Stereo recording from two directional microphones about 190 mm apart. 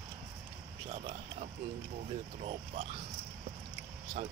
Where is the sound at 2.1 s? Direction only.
35° right (ahead or behind).